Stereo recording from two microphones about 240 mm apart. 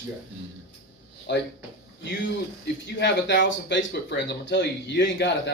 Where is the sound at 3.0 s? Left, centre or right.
Left.